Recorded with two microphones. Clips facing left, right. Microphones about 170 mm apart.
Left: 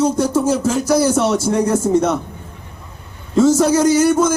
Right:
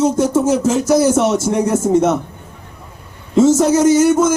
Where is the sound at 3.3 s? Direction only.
20° right (ahead or behind).